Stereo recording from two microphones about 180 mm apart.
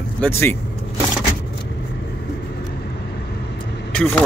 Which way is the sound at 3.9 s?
5° left (ahead or behind).